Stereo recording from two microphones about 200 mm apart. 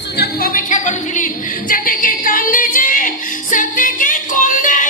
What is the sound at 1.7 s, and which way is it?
Singing, 45° left (ahead or behind).